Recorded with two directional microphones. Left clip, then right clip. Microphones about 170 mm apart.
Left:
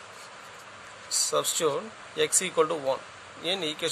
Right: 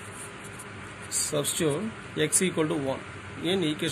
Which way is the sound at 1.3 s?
70° left (ahead or behind).